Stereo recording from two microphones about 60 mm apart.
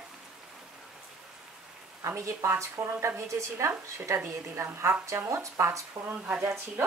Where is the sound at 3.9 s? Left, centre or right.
Right.